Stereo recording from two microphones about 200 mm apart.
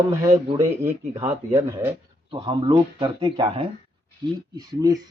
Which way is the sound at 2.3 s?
25° right (ahead or behind).